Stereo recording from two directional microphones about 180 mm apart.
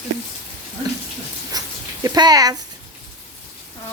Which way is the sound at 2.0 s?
20° right (ahead or behind).